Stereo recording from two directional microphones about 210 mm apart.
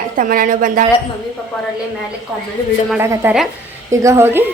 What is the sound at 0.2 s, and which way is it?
Speech, 40° right (ahead or behind).